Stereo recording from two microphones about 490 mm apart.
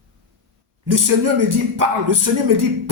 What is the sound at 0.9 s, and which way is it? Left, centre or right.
Speech, right.